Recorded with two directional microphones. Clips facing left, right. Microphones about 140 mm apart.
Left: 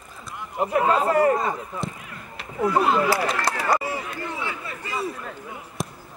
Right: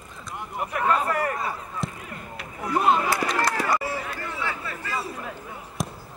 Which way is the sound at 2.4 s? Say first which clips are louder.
Left 4 dB; 25° left (ahead or behind).